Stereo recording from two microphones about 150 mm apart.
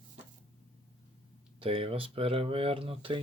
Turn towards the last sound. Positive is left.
turn(degrees=-35)  # may be behind; listen again after turning